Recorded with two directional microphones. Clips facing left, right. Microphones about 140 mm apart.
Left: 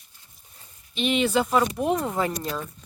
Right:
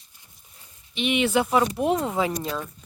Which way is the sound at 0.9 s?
5° right (ahead or behind).